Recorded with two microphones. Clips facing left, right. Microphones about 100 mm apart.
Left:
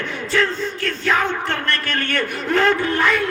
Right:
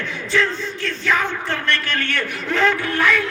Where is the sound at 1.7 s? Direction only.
45° left (ahead or behind).